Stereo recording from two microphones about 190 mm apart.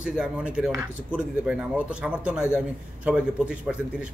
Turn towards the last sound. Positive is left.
turn(degrees=-5)  # may be behind; listen again after turning